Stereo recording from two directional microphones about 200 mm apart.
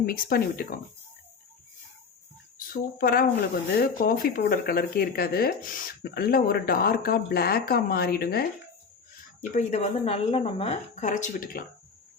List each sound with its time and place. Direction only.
0.0 s speech: 45° left (ahead or behind)
3.0 s speech: 50° left (ahead or behind)
9.6 s a woman's voice: 35° left (ahead or behind)